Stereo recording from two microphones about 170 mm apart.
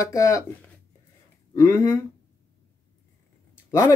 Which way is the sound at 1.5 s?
20° left (ahead or behind).